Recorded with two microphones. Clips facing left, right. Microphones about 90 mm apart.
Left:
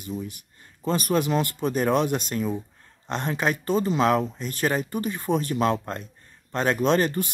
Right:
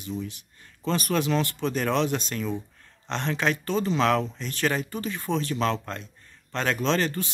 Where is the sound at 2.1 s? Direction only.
15° left (ahead or behind).